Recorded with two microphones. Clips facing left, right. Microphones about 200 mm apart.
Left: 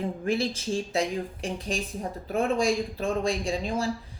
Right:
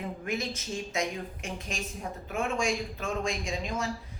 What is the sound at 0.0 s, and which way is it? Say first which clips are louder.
Speech: left 6 dB; 30° left (ahead or behind).